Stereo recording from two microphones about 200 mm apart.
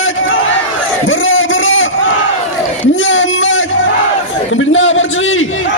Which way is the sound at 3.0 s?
70° left (ahead or behind).